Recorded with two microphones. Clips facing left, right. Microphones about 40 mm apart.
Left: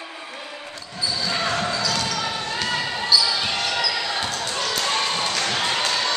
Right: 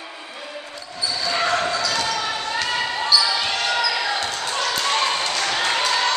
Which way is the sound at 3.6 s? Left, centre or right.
Centre.